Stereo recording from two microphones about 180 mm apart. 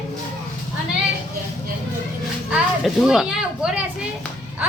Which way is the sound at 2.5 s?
Centre (ahead or behind).